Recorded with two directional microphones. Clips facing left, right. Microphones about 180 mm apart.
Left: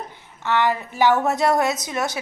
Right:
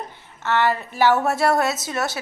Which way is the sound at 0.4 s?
15° left (ahead or behind).